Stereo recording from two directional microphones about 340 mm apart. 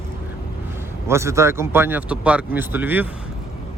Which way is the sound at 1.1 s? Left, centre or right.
Centre.